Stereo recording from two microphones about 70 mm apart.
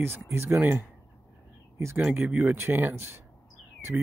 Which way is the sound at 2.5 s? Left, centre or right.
Right.